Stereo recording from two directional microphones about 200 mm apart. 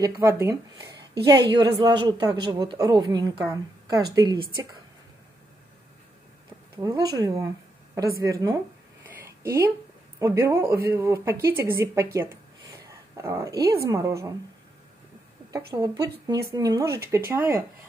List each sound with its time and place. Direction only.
0.0 s a woman's voice: 10° right (ahead or behind)
6.8 s a woman's voice: 20° right (ahead or behind)
9.0 s a sound: 10° right (ahead or behind)
10.1 s speech: 15° right (ahead or behind)
15.5 s speech: 15° right (ahead or behind)